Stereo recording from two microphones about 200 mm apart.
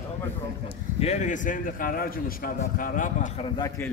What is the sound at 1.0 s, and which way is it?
A man's voice, 35° left (ahead or behind).